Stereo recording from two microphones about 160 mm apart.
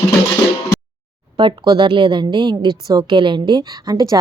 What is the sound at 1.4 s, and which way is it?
A woman's voice, 30° right (ahead or behind).